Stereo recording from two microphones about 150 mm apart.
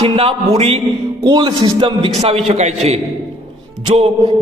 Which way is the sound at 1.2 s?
30° right (ahead or behind).